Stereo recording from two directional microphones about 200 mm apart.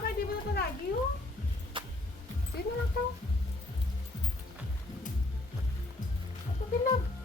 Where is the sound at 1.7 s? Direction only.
25° right (ahead or behind).